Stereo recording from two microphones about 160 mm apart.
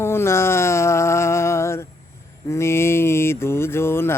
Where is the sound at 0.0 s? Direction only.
15° left (ahead or behind).